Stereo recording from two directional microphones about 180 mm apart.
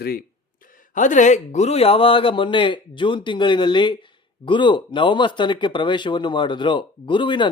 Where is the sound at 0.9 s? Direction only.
45° left (ahead or behind).